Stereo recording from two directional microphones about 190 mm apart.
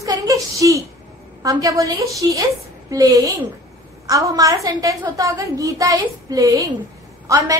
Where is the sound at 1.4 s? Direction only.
20° right (ahead or behind).